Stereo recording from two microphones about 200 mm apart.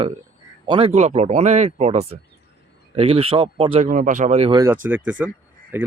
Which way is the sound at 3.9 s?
40° right (ahead or behind).